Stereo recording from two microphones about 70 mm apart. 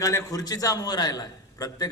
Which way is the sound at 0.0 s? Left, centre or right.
Left.